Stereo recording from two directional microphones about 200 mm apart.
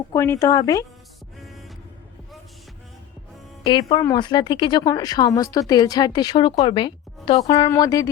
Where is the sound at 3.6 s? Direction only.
20° left (ahead or behind).